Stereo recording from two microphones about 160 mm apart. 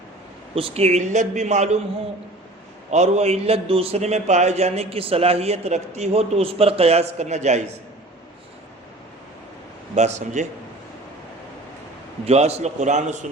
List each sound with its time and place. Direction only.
0.5 s speech: 40° right (ahead or behind)
2.9 s a man's voice: 45° right (ahead or behind)
9.9 s speech: 45° right (ahead or behind)
12.2 s speech: 40° right (ahead or behind)